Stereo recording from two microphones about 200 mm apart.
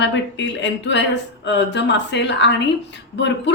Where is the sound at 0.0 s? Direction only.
65° left (ahead or behind).